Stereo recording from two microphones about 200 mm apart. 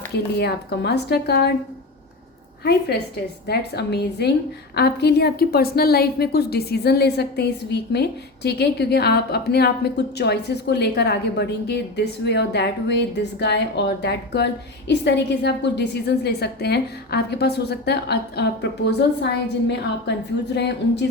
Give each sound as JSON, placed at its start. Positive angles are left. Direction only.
{"t": 0.3, "sound": "a woman's voice", "side_deg": 55}
{"t": 3.4, "sound": "a woman's voice", "side_deg": 55}